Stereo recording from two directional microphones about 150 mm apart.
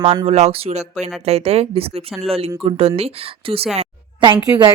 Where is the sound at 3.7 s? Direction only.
35° right (ahead or behind).